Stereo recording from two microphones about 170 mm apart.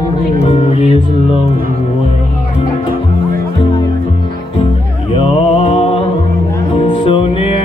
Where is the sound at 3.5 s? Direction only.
30° left (ahead or behind).